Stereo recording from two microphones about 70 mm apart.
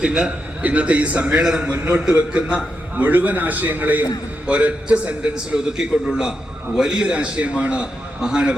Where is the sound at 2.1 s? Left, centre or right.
Centre.